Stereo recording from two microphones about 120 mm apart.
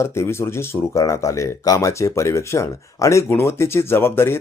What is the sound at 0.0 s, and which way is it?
Speech, 20° left (ahead or behind).